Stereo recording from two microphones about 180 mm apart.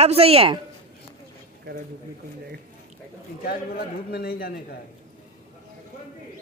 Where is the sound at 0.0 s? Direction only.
35° right (ahead or behind).